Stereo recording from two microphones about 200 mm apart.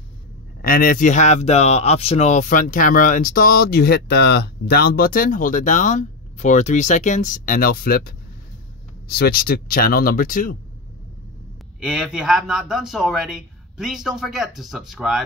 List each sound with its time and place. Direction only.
0.6 s speech: 45° left (ahead or behind)
11.8 s a man's voice: 5° right (ahead or behind)